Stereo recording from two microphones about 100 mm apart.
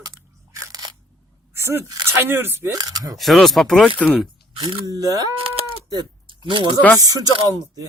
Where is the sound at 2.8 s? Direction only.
45° right (ahead or behind).